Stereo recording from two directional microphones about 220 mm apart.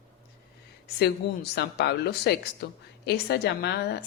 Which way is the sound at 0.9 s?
50° left (ahead or behind).